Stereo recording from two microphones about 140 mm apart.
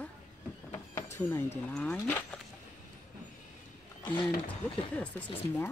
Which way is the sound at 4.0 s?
35° left (ahead or behind).